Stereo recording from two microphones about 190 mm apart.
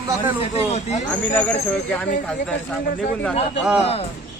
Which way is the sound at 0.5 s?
35° left (ahead or behind).